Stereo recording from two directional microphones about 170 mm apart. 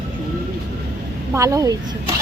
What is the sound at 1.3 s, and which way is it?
Speech, 20° right (ahead or behind).